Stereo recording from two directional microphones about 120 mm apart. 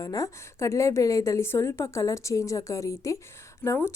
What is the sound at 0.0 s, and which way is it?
A woman's voice, 30° left (ahead or behind).